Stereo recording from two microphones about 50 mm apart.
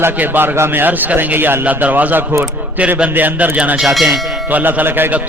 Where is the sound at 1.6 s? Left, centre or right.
Right.